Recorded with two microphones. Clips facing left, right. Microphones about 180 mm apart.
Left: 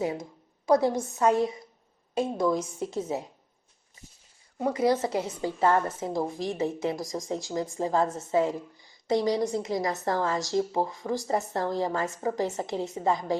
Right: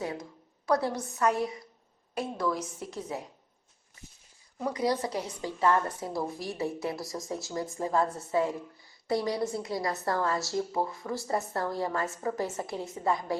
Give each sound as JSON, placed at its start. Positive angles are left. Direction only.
{"t": 0.0, "sound": "speech", "side_deg": 20}
{"t": 4.5, "sound": "speech", "side_deg": 25}